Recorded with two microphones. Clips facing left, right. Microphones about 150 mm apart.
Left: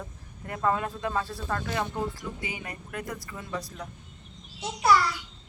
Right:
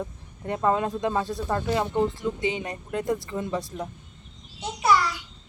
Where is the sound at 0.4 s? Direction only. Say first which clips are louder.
Right 4 dB; 25° right (ahead or behind).